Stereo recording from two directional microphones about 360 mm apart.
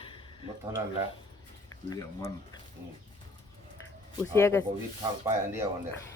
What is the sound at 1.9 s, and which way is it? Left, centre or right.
Speech, centre.